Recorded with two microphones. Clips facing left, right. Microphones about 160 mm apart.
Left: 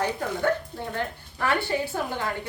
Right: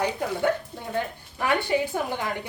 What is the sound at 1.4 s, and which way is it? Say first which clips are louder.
Speech: right 2 dB; 15° right (ahead or behind).